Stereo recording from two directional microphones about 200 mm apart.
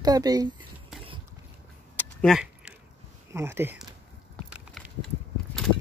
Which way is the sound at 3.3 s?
10° right (ahead or behind).